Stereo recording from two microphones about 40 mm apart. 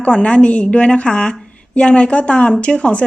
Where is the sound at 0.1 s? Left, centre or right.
Left.